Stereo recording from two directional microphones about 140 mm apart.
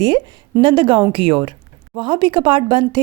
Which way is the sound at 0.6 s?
35° right (ahead or behind).